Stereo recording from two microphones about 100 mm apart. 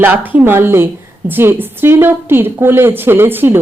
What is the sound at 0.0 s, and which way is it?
A woman's voice, 20° right (ahead or behind).